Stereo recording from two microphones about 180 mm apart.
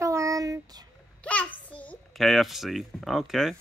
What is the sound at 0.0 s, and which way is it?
Child singing, 15° right (ahead or behind).